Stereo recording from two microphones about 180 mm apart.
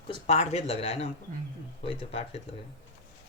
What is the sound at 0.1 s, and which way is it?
Speech, 35° left (ahead or behind).